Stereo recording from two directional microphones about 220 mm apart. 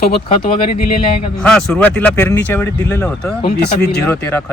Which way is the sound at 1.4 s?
5° left (ahead or behind).